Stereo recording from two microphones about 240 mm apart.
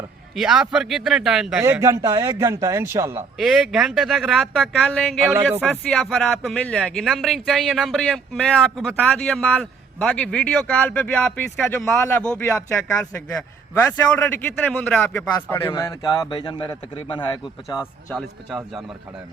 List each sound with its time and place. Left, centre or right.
0.3 s speech: centre
3.3 s a man's voice: centre
18.1 s speech: centre